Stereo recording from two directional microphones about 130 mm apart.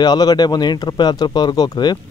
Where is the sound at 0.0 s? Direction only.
30° left (ahead or behind).